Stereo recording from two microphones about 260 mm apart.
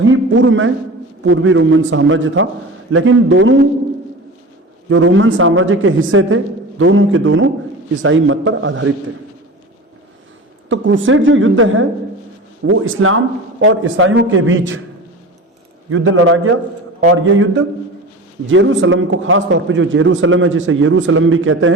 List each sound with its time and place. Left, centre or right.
0.0 s a sound: right
1.2 s a man's voice: right
4.9 s a man's voice: right
10.7 s a man's voice: right
15.9 s a man's voice: right